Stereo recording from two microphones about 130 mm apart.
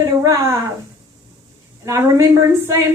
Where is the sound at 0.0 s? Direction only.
25° right (ahead or behind).